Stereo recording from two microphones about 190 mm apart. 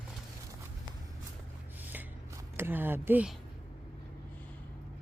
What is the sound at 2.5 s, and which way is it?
Speech, 10° right (ahead or behind).